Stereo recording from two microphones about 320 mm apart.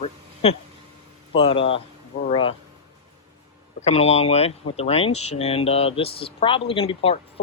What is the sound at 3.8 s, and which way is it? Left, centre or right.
Speech, centre.